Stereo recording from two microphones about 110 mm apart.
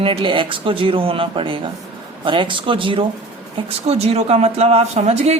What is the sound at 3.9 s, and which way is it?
Speech, 70° right (ahead or behind).